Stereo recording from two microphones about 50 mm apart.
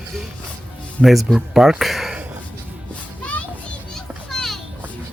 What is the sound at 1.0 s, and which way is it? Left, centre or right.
Speech, centre.